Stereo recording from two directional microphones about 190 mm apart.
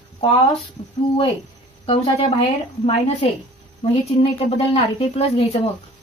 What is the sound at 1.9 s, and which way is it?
A woman's voice, 25° left (ahead or behind).